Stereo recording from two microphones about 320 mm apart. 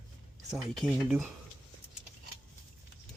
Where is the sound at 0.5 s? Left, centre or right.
Centre.